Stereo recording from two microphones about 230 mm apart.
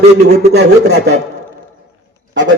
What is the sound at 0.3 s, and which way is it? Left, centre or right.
Speech, right.